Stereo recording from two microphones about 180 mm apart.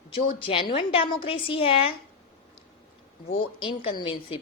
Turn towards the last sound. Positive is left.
turn(degrees=30)  # may be behind; listen again after turning